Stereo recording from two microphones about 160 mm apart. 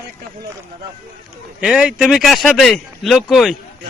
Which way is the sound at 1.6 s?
5° right (ahead or behind).